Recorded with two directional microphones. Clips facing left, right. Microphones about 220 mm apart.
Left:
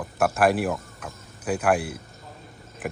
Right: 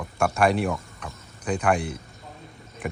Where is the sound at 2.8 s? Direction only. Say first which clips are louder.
Even; 5° left (ahead or behind).